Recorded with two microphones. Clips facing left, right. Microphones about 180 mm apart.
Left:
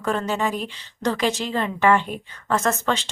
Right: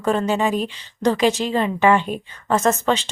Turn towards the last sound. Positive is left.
turn(degrees=-15)  # may be behind; listen again after turning